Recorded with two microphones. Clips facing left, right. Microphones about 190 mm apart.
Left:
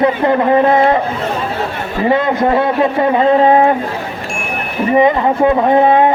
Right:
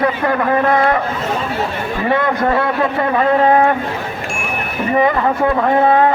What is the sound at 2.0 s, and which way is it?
A man's voice, 20° left (ahead or behind).